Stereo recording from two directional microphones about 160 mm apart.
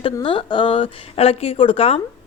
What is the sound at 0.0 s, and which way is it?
A woman's voice, 30° left (ahead or behind).